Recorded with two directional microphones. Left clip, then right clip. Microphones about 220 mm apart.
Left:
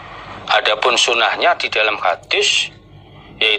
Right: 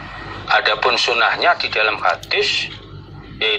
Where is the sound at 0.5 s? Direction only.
45° left (ahead or behind).